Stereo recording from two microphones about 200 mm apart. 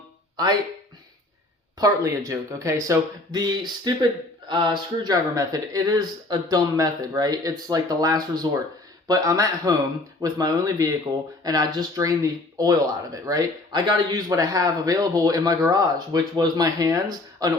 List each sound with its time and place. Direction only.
1.8 s speech: 15° right (ahead or behind)